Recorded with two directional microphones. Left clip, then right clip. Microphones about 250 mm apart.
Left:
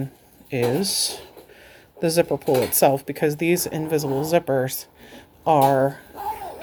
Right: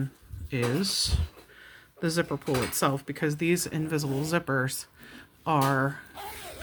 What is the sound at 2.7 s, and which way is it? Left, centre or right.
Speech, centre.